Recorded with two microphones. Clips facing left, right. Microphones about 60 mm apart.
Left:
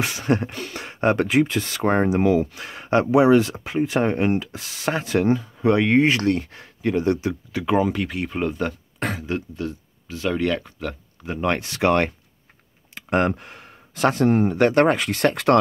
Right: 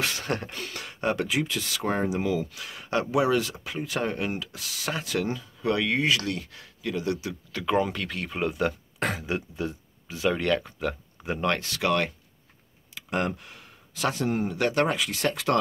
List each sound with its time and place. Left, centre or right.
0.0 s speech: left
1.0 s speech: left
7.5 s speech: centre
11.4 s speech: left
12.9 s speech: left